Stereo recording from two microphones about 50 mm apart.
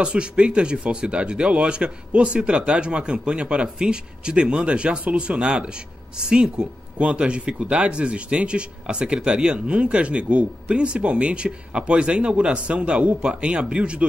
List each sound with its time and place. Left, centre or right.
0.0 s speech: right